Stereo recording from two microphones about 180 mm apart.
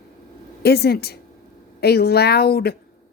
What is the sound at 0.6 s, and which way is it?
Speech, 60° left (ahead or behind).